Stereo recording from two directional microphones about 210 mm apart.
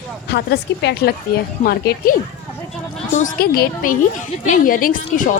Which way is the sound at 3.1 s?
40° left (ahead or behind).